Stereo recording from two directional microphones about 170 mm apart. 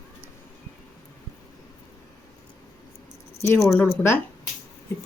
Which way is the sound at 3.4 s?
15° left (ahead or behind).